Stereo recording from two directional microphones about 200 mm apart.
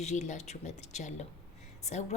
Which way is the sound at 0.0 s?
35° left (ahead or behind).